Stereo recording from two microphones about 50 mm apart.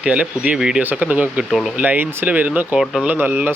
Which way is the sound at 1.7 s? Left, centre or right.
Right.